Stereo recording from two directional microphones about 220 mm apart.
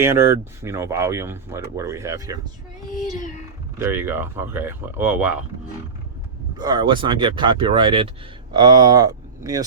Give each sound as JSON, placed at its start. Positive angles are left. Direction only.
{"t": 0.0, "sound": "speech", "side_deg": -10}
{"t": 3.8, "sound": "speech", "side_deg": -10}
{"t": 6.6, "sound": "speech", "side_deg": -20}